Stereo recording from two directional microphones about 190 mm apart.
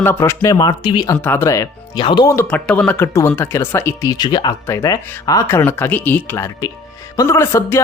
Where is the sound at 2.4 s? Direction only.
5° left (ahead or behind).